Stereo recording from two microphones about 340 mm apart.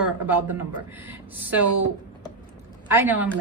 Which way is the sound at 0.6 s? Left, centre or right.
Centre.